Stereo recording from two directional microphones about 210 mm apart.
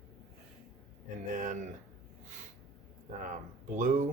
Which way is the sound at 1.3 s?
40° right (ahead or behind).